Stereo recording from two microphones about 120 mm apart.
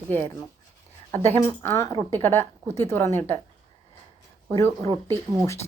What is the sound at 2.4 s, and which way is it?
Speech, 20° left (ahead or behind).